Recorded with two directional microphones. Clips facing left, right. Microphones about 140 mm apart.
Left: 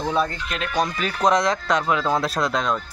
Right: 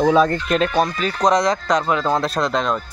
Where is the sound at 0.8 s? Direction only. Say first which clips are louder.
Right 3 dB; 5° left (ahead or behind).